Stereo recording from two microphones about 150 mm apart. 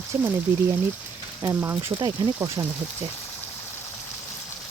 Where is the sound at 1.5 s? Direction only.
15° right (ahead or behind).